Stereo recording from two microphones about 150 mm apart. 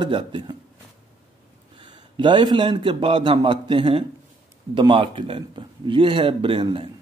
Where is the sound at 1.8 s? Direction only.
30° right (ahead or behind).